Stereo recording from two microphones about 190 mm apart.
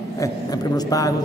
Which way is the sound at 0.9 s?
20° left (ahead or behind).